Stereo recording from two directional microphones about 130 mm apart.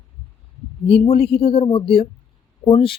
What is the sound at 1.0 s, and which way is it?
Speech, 50° left (ahead or behind).